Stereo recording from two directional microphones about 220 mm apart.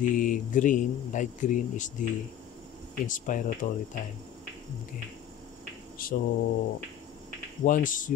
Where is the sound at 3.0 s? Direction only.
35° left (ahead or behind).